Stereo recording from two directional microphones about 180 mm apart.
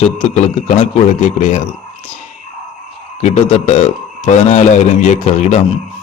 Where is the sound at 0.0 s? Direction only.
35° left (ahead or behind).